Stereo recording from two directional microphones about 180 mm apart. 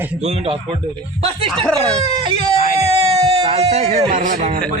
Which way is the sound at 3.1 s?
35° right (ahead or behind).